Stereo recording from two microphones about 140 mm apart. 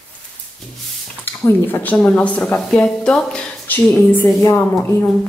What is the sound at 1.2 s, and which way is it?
Speech, 15° left (ahead or behind).